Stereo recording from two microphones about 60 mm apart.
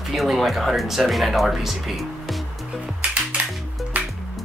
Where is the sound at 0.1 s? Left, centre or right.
Centre.